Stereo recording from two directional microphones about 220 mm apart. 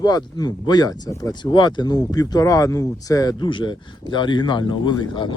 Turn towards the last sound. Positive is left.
turn(degrees=20)  # may be behind; listen again after turning